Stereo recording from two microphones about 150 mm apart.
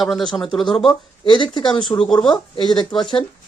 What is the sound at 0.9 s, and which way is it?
Speech, 35° left (ahead or behind).